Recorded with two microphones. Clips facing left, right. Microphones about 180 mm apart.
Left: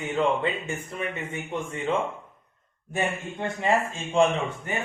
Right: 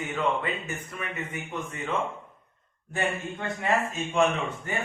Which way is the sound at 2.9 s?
25° left (ahead or behind).